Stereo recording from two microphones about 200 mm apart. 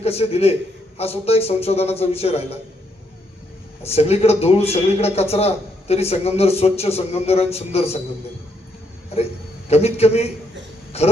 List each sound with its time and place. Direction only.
0.0 s a man's voice: 30° left (ahead or behind)
3.8 s a man's voice: 30° left (ahead or behind)
9.6 s a man's voice: 30° left (ahead or behind)